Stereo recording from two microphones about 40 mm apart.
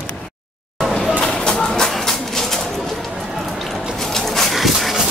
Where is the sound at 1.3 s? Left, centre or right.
Centre.